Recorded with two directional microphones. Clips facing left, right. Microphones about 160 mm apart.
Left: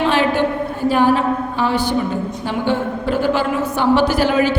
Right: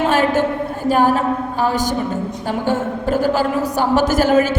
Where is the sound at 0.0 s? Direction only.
45° right (ahead or behind).